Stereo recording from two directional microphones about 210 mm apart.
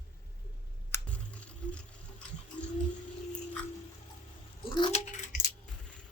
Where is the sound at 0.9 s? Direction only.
10° left (ahead or behind).